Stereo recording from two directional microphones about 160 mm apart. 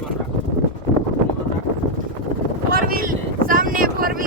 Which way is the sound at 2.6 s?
65° right (ahead or behind).